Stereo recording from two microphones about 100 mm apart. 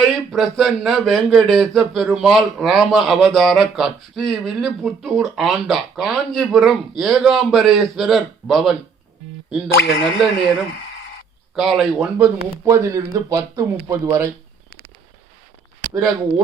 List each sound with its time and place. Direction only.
0.0 s speech: centre (ahead or behind)
11.5 s speech: centre (ahead or behind)
12.1 s speech: 25° right (ahead or behind)